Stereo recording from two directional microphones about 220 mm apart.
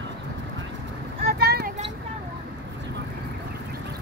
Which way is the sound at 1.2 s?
45° right (ahead or behind).